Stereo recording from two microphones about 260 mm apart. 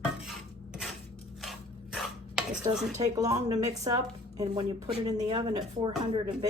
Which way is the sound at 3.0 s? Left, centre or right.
Centre.